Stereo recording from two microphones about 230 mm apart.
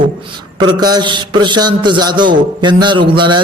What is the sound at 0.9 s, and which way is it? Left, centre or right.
A man's voice, centre.